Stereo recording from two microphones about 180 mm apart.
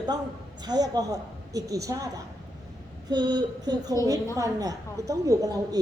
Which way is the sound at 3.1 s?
25° right (ahead or behind).